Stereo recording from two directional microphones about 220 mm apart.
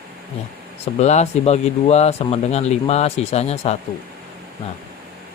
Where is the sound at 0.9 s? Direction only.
30° left (ahead or behind).